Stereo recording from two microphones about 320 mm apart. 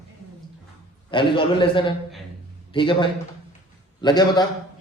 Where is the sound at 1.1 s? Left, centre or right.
Centre.